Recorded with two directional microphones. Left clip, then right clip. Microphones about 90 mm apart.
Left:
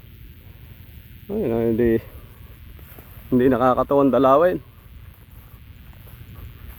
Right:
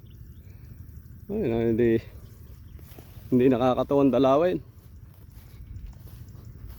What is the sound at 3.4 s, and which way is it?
Speech, 30° right (ahead or behind).